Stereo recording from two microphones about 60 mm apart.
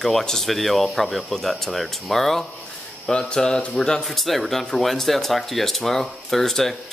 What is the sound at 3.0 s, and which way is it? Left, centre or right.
Speech, centre.